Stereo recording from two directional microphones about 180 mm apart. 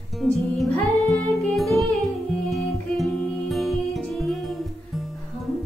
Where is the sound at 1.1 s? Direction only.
Centre (ahead or behind).